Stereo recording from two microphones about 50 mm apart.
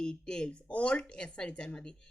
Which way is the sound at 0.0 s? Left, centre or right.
Centre.